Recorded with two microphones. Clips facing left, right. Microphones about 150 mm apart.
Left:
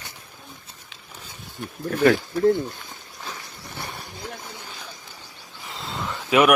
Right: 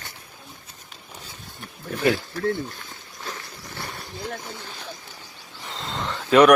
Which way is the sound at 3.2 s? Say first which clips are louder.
Right 2 dB; 15° left (ahead or behind).